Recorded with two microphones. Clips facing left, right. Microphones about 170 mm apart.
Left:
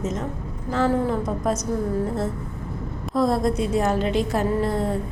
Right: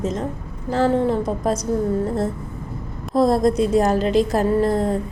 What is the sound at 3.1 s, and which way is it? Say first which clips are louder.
A woman's voice: right 4 dB; 35° right (ahead or behind).